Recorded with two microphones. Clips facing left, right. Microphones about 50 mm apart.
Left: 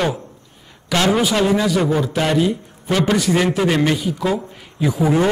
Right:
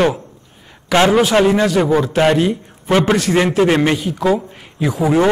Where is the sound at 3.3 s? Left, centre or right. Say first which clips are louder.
Right 3 dB; right.